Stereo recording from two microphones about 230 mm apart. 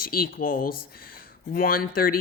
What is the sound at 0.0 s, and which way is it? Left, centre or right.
A man's voice, left.